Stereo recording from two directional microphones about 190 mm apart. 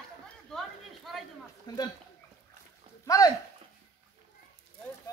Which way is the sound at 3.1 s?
20° left (ahead or behind).